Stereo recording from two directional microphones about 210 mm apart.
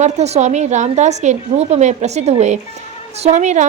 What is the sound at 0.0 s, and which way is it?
A woman's voice, 35° right (ahead or behind).